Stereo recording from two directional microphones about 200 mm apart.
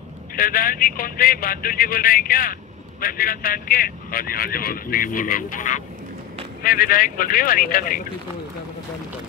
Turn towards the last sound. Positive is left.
turn(degrees=45)  # may be behind; listen again after turning